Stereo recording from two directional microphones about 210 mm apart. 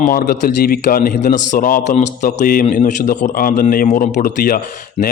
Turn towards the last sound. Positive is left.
turn(degrees=45)  # may be behind; listen again after turning